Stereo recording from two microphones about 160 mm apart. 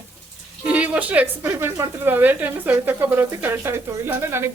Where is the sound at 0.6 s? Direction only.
10° right (ahead or behind).